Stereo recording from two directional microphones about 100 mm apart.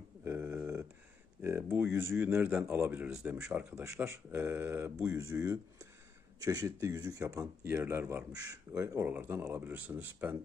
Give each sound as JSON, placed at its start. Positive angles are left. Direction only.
{"t": 0.2, "sound": "a sound", "side_deg": -25}
{"t": 1.8, "sound": "speech", "side_deg": -20}
{"t": 7.7, "sound": "speech", "side_deg": -20}
{"t": 8.4, "sound": "speech", "side_deg": -30}